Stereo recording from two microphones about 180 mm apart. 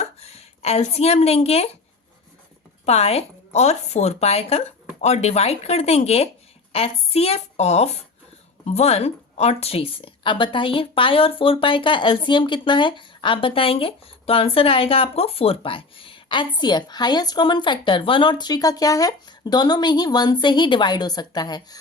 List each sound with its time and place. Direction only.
0.0 s a woman's voice: 35° left (ahead or behind)
2.8 s a woman's voice: 35° left (ahead or behind)